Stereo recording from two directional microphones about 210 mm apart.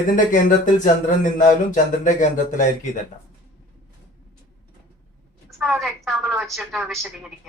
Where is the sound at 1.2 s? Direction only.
35° left (ahead or behind).